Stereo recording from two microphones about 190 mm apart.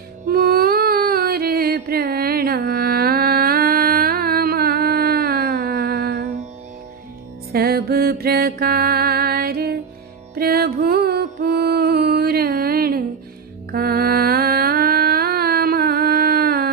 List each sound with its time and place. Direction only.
0.3 s music: 55° right (ahead or behind)
7.5 s music: 55° right (ahead or behind)